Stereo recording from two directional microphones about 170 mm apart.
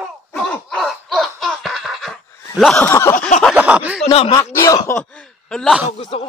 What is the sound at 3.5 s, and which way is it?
Speech, 10° right (ahead or behind).